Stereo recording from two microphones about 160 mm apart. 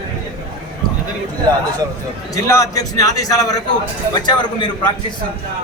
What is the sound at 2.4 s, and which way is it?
A man's voice, 20° left (ahead or behind).